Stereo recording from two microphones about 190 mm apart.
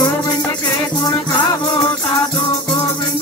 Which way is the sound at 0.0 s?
20° left (ahead or behind).